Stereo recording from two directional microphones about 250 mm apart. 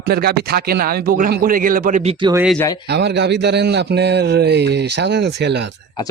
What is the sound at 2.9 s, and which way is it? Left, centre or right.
A man's voice, right.